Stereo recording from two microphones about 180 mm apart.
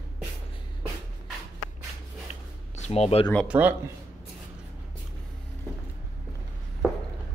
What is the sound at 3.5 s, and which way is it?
Speech, 10° right (ahead or behind).